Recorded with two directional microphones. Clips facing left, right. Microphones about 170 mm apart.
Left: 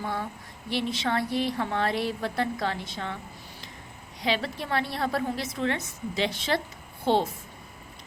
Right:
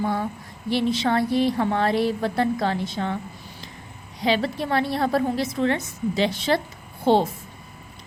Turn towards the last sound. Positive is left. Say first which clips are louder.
# right 5 dB
turn(degrees=-35)  # may be behind; listen again after turning